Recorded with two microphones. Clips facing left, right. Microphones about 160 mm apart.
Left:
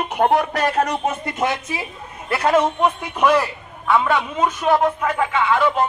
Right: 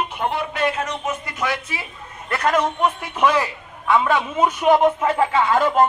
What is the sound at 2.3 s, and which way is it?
A man's voice, 10° left (ahead or behind).